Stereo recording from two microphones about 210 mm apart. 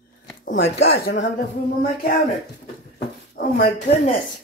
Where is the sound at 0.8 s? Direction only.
50° left (ahead or behind).